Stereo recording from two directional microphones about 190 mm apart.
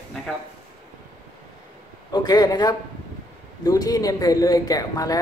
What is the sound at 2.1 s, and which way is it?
Speech, 20° left (ahead or behind).